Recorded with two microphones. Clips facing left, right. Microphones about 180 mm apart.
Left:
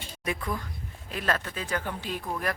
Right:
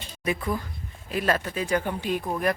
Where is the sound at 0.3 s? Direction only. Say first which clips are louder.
Right 4 dB; 5° right (ahead or behind).